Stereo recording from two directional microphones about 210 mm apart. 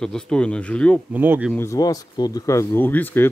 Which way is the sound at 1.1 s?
10° right (ahead or behind).